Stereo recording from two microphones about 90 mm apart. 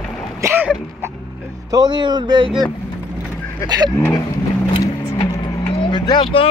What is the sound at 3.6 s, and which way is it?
Speech, 35° left (ahead or behind).